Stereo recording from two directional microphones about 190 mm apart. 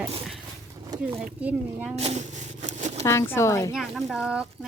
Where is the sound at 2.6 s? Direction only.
35° right (ahead or behind).